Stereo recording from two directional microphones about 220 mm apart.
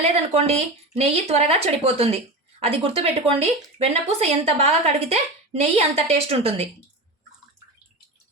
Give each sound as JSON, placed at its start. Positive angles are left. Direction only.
{"t": 0.0, "sound": "speech", "side_deg": -30}